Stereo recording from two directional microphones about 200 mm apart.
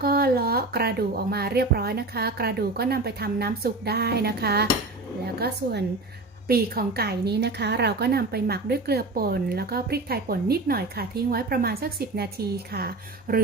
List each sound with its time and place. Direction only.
0.0 s a woman's voice: 50° right (ahead or behind)